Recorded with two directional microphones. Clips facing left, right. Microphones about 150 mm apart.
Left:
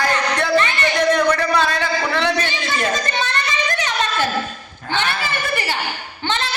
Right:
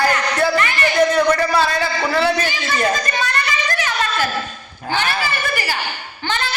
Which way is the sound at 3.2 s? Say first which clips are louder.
Even; 25° left (ahead or behind).